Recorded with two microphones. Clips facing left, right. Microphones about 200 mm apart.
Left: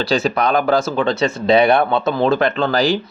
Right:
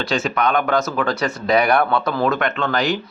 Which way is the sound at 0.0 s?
35° left (ahead or behind).